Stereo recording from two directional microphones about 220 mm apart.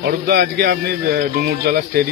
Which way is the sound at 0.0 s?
45° right (ahead or behind).